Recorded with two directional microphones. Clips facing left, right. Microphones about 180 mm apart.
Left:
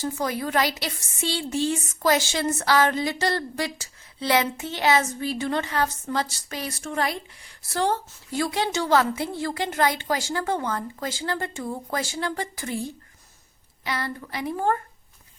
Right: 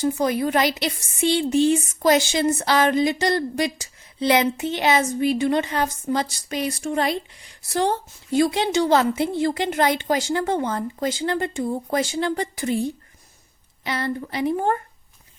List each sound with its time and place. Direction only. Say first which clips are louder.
0.0 s a woman's voice: right 6 dB; 20° right (ahead or behind)
13.8 s a woman's voice: right 5 dB; 25° right (ahead or behind)